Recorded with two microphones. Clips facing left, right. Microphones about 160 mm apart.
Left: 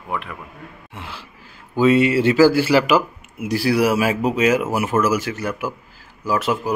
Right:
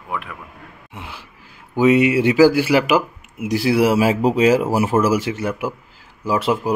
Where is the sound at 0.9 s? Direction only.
15° right (ahead or behind).